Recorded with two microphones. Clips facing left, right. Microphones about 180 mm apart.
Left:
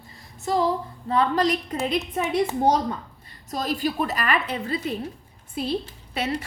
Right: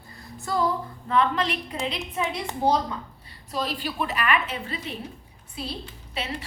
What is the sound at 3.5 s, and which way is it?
A woman's voice, 45° left (ahead or behind).